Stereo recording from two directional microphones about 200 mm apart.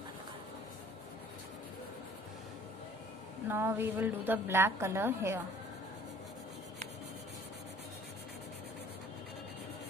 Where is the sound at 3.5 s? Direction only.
10° right (ahead or behind).